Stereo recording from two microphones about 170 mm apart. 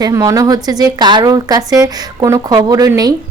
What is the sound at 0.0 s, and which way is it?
Speech, 20° right (ahead or behind).